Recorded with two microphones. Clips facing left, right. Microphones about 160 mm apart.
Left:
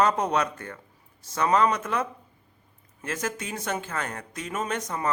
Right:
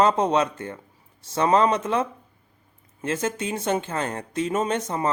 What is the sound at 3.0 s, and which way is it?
Speech, 25° right (ahead or behind).